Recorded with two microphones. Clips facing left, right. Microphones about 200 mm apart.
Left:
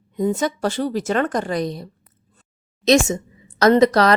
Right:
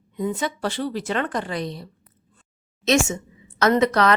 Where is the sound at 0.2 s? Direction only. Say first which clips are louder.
Left 5 dB; 40° left (ahead or behind).